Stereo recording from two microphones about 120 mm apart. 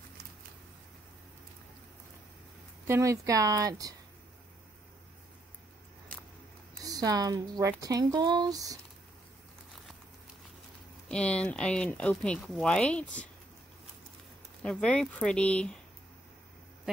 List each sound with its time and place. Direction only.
2.9 s speech: 25° right (ahead or behind)
6.8 s speech: 30° right (ahead or behind)
11.1 s speech: 10° left (ahead or behind)
14.6 s speech: 10° left (ahead or behind)